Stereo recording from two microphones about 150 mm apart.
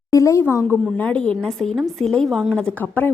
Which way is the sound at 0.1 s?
20° left (ahead or behind).